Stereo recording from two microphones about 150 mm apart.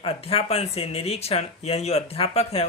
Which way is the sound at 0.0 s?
40° left (ahead or behind).